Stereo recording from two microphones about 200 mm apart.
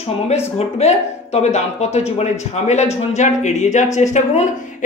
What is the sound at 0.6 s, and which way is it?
Speech, 35° left (ahead or behind).